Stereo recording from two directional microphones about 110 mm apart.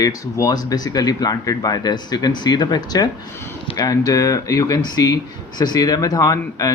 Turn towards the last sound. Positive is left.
turn(degrees=35)  # may be behind; listen again after turning